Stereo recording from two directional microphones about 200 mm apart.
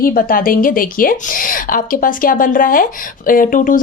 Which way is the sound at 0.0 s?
45° left (ahead or behind).